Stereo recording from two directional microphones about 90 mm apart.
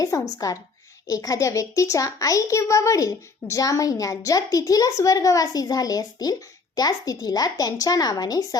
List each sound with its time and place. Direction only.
0.0 s a child's voice: 40° left (ahead or behind)